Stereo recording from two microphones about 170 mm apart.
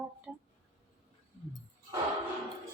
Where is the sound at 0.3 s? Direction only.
10° right (ahead or behind).